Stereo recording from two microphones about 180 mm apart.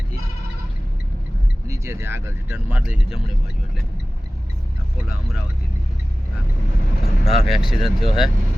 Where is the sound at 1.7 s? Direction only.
15° right (ahead or behind).